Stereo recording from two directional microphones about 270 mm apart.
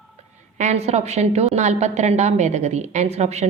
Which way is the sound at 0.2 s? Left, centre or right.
Right.